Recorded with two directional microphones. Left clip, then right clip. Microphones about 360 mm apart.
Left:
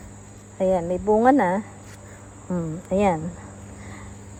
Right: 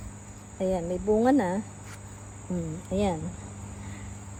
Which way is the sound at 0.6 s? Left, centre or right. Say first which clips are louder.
Left 7 dB; centre.